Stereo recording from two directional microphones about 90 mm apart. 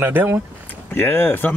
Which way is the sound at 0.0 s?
25° right (ahead or behind).